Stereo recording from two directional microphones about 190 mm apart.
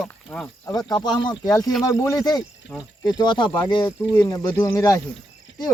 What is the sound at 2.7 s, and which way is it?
Speech, 5° left (ahead or behind).